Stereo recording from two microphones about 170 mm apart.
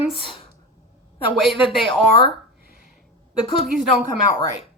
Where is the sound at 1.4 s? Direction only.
Centre (ahead or behind).